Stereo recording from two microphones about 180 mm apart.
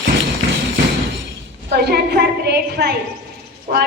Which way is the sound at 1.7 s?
65° right (ahead or behind).